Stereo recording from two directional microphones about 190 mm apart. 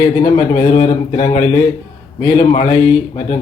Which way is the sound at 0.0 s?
20° left (ahead or behind).